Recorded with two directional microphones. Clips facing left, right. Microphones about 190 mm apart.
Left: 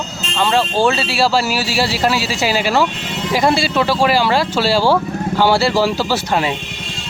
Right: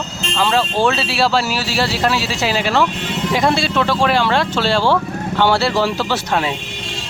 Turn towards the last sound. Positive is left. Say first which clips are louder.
# left 1 dB
turn(degrees=0)  # may be behind; listen again after turning